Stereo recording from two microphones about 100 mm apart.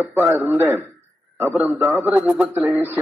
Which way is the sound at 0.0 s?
20° right (ahead or behind).